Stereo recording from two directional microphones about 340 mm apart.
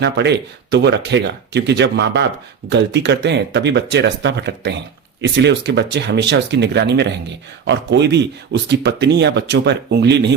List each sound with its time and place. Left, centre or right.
0.0 s speech: right